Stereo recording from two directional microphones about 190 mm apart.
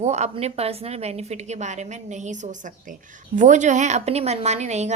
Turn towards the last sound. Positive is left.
turn(degrees=-35)  # may be behind; listen again after turning